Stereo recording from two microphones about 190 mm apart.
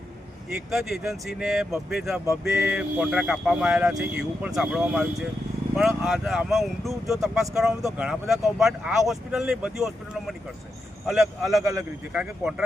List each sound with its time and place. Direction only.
0.5 s speech: centre (ahead or behind)
11.6 s a man's voice: 15° right (ahead or behind)
12.1 s speech: 5° right (ahead or behind)